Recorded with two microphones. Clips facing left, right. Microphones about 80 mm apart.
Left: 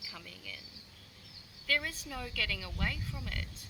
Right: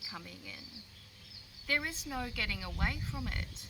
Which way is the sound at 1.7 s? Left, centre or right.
Right.